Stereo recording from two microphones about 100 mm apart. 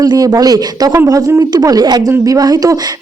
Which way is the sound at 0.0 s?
35° right (ahead or behind).